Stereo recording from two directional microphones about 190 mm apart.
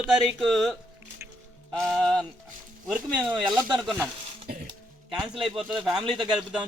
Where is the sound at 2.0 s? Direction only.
Centre (ahead or behind).